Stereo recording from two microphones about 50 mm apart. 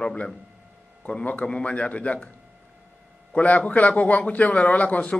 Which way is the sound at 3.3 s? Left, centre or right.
Left.